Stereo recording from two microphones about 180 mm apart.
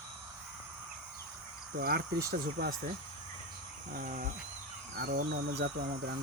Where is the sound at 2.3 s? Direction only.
55° right (ahead or behind).